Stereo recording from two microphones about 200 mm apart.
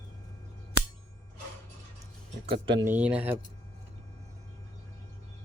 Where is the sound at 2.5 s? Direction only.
25° right (ahead or behind).